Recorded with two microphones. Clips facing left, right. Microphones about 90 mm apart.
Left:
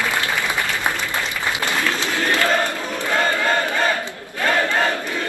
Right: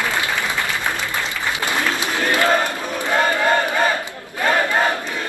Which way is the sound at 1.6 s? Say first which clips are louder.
Right 1 dB; 20° right (ahead or behind).